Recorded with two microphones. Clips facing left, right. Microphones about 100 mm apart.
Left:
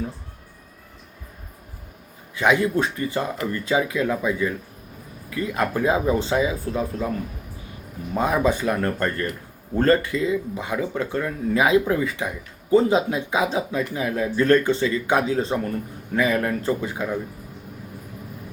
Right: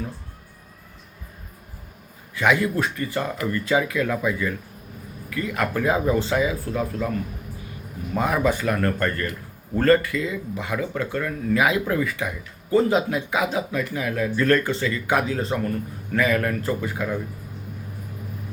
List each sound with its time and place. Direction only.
2.3 s speech: 20° left (ahead or behind)
8.1 s speech: 20° left (ahead or behind)